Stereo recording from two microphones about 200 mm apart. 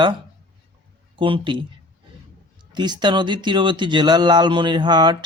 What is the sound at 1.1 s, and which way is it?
Speech, 25° right (ahead or behind).